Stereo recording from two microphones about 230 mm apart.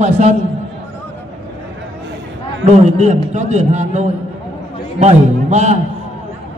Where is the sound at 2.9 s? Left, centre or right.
Right.